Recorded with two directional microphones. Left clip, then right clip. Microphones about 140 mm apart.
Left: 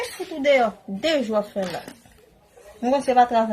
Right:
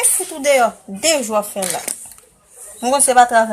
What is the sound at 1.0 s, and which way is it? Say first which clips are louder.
Speech: right 5 dB; 20° left (ahead or behind).